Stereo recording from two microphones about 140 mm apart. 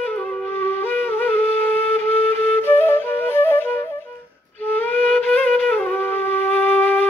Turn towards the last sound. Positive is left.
turn(degrees=10)  # may be behind; listen again after turning